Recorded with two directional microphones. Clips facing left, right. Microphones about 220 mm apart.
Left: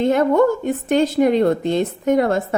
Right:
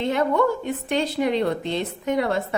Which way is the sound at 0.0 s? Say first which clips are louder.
Left 6 dB; 45° left (ahead or behind).